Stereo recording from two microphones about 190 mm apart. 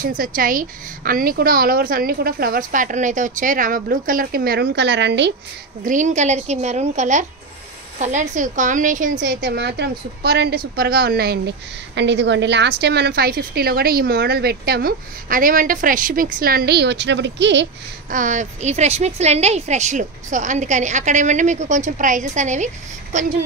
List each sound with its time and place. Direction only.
0.0 s a woman's voice: 50° right (ahead or behind); by 5.3 s 65° right (ahead or behind)
5.9 s a woman's voice: 40° right (ahead or behind)
9.2 s a woman's voice: 60° right (ahead or behind)
18.1 s a woman's voice: 40° right (ahead or behind)